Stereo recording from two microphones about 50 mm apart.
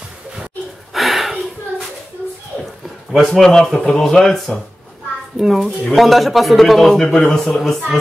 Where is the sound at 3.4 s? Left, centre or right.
Centre.